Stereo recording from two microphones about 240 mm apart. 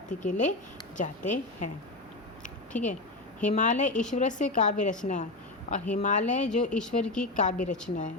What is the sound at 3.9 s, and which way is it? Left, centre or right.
Speech, centre.